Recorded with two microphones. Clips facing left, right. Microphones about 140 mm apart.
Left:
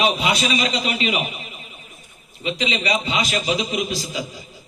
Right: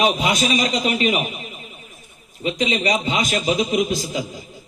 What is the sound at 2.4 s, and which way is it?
A man's voice, 45° right (ahead or behind).